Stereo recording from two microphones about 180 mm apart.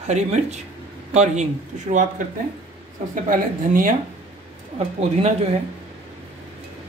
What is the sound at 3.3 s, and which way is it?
Speech, 50° right (ahead or behind).